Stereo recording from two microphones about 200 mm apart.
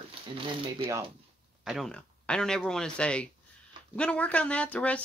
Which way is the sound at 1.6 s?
Centre (ahead or behind).